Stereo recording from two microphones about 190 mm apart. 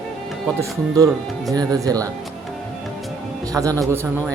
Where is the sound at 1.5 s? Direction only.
20° right (ahead or behind).